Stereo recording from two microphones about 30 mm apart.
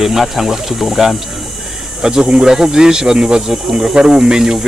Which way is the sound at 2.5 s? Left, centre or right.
Centre.